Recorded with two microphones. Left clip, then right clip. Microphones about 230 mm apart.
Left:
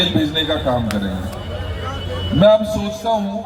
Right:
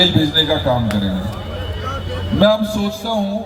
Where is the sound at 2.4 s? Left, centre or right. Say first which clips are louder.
Left 2 dB; right.